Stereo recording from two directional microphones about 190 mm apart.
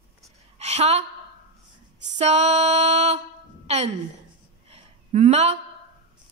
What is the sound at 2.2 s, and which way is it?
Mantra, 35° right (ahead or behind).